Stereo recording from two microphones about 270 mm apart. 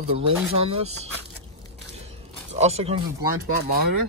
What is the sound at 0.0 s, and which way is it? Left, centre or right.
Speech, right.